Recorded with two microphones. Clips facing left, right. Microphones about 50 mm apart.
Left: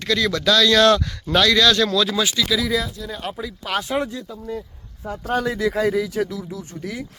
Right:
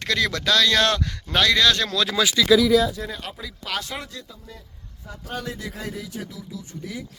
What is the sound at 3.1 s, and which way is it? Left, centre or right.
Speech, centre.